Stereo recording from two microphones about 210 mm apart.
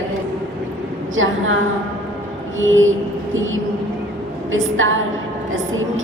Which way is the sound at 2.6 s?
65° right (ahead or behind).